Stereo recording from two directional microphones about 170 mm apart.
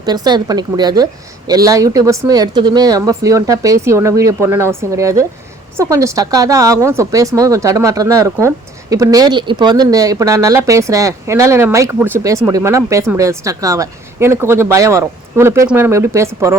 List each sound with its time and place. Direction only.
0.0 s speech: 25° right (ahead or behind)